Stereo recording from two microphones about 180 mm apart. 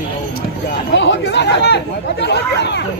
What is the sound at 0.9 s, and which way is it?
Speech, 80° left.